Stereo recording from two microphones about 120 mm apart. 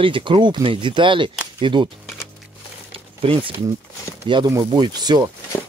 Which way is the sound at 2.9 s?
50° right (ahead or behind).